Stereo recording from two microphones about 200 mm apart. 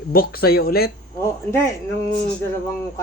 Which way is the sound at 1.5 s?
15° left (ahead or behind).